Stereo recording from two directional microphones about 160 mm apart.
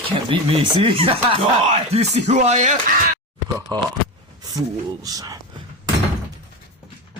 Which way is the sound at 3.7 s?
25° right (ahead or behind).